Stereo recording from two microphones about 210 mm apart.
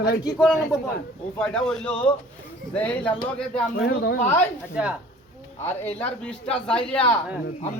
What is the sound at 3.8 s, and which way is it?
Speech, 50° left (ahead or behind).